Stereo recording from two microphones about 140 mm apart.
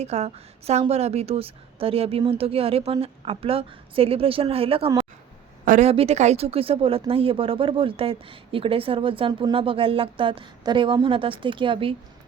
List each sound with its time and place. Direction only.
0.0 s a woman's voice: 50° right (ahead or behind)